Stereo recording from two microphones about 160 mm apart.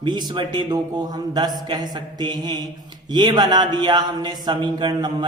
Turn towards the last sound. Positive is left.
turn(degrees=-30)  # may be behind; listen again after turning